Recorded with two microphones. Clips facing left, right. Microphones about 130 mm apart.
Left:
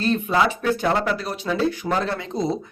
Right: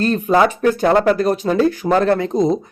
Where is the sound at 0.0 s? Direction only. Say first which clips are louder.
Right 6 dB; 45° right (ahead or behind).